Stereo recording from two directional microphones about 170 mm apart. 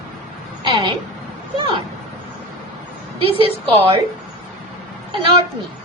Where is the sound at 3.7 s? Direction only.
35° right (ahead or behind).